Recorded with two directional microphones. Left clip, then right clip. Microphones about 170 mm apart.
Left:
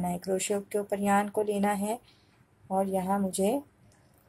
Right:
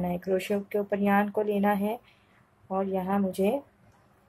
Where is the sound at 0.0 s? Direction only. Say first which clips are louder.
Right 2 dB; 45° left (ahead or behind).